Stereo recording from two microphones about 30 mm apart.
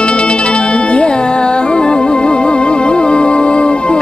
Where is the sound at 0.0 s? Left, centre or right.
Left.